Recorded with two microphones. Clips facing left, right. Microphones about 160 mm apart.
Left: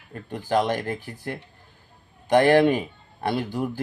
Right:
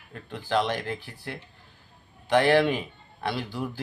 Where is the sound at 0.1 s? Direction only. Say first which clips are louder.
Left 3 dB; 45° left (ahead or behind).